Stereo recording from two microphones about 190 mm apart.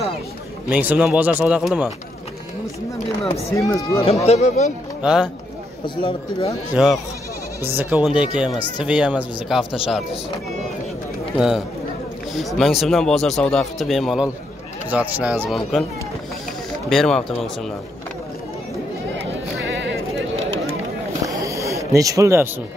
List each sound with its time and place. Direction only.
0.7 s speech: 10° right (ahead or behind)
3.5 s speech: 15° left (ahead or behind)
4.0 s speech: 35° left (ahead or behind)
5.0 s speech: 5° right (ahead or behind)
6.7 s speech: centre (ahead or behind)
11.3 s speech: centre (ahead or behind)
16.9 s speech: centre (ahead or behind)
19.6 s a sound: 70° right (ahead or behind)
21.3 s a sound: 15° right (ahead or behind)